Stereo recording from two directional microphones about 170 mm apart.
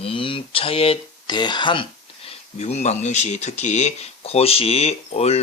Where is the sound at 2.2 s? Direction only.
40° left (ahead or behind).